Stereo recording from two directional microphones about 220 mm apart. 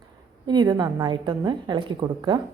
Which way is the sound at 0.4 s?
20° right (ahead or behind).